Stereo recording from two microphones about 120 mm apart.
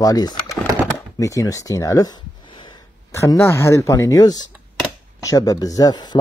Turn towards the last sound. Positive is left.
turn(degrees=35)  # may be behind; listen again after turning